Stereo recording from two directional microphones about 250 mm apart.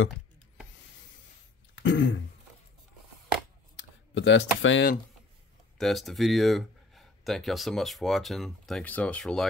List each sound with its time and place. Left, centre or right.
1.8 s throat clearing: left
3.7 s speech: left
5.8 s speech: centre